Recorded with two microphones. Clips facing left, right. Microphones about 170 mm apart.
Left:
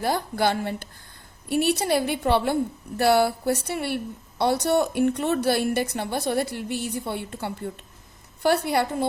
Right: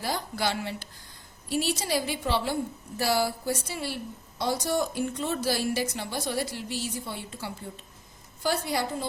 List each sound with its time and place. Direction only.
0.0 s a woman's voice: 55° left (ahead or behind)